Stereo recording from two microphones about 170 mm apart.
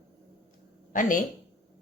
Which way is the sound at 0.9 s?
50° left (ahead or behind).